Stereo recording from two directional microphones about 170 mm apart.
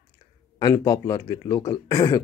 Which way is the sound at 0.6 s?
25° left (ahead or behind).